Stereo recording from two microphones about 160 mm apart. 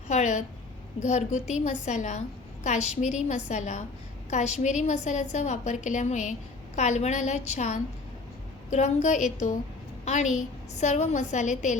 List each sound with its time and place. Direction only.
0.1 s a woman's voice: 45° left (ahead or behind)
10.8 s a woman's voice: 45° left (ahead or behind)